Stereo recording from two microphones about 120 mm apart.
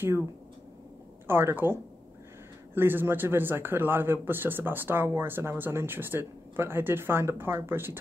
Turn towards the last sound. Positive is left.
turn(degrees=-20)  # may be behind; listen again after turning